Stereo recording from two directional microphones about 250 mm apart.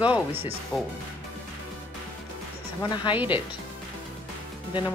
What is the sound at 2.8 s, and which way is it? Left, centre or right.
Speech, centre.